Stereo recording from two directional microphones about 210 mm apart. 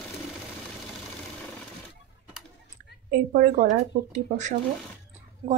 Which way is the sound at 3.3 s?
40° right (ahead or behind).